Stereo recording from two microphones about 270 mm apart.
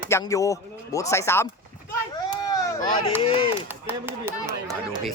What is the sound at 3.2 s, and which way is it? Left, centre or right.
Speech, centre.